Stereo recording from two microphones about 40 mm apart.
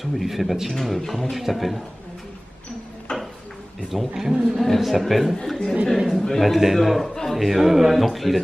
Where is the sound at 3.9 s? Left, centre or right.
Centre.